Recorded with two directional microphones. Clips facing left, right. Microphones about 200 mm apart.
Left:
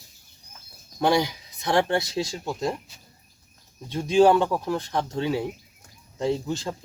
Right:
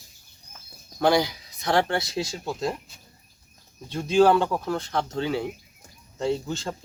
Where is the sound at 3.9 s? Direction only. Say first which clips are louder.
Left 1 dB; 15° left (ahead or behind).